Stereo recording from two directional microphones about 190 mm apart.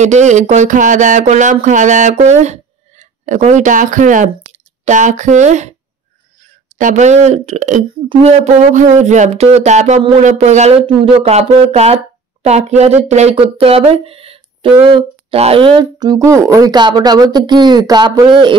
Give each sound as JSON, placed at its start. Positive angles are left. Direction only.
{"t": 0.0, "sound": "speech", "side_deg": -40}
{"t": 6.8, "sound": "speech", "side_deg": -40}